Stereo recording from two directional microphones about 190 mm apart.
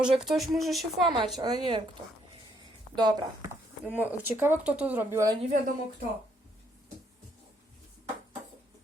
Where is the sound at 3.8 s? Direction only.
10° right (ahead or behind).